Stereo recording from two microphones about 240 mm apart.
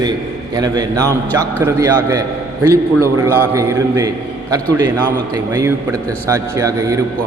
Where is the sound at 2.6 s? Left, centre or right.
Right.